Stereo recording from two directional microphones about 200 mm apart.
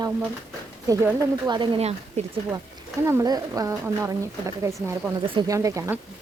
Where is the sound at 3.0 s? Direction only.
15° right (ahead or behind).